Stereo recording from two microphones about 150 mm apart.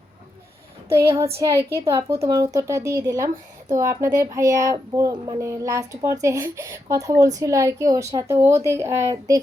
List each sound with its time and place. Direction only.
1.1 s speech: 20° right (ahead or behind)